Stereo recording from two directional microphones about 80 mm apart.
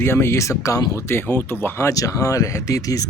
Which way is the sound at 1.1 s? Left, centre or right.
Left.